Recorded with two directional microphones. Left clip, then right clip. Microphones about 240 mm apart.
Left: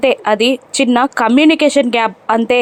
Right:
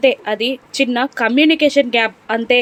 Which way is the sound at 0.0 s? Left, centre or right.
Centre.